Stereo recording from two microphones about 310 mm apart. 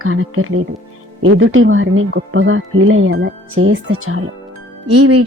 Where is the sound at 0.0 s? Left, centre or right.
Right.